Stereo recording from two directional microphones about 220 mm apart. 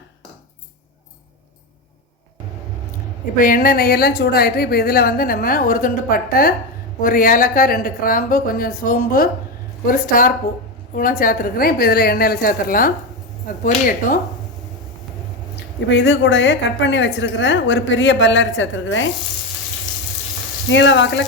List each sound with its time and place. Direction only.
3.3 s a woman's voice: 40° left (ahead or behind)
15.9 s a woman's voice: 55° left (ahead or behind)
20.7 s a woman's voice: 55° left (ahead or behind)